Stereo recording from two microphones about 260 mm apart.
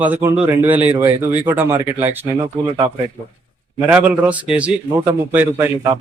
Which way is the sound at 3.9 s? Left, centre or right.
Centre.